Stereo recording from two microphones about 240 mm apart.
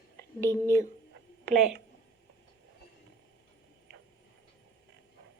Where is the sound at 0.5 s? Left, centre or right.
Centre.